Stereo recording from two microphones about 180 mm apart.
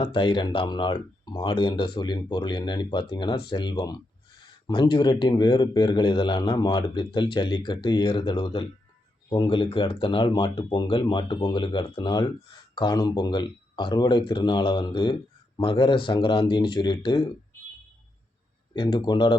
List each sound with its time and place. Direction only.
0.0 s speech: 25° left (ahead or behind)
18.7 s speech: 25° left (ahead or behind)